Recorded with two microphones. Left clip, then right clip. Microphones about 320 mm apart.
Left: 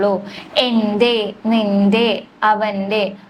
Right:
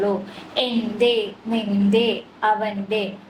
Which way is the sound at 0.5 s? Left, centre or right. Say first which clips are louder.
Left 7 dB; left.